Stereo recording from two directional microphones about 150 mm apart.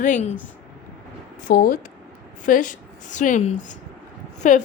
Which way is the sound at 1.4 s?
65° left (ahead or behind).